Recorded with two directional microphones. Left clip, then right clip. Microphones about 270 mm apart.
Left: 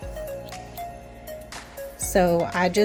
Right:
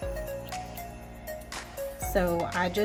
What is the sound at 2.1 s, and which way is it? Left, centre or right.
Speech, left.